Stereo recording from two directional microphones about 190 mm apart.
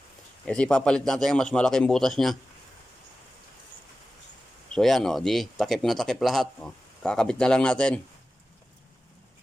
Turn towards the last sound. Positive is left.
turn(degrees=5)  # may be behind; listen again after turning